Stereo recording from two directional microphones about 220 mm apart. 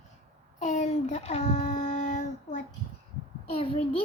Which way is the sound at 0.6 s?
35° left (ahead or behind).